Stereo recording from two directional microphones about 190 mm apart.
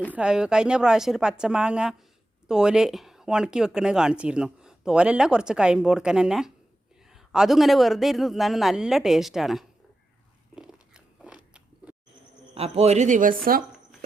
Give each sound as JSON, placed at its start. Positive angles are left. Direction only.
{"t": 0.1, "sound": "speech", "side_deg": -5}
{"t": 10.5, "sound": "biting", "side_deg": -5}
{"t": 12.5, "sound": "a woman's voice", "side_deg": -30}